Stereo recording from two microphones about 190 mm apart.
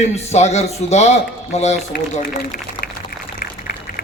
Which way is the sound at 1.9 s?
60° left (ahead or behind).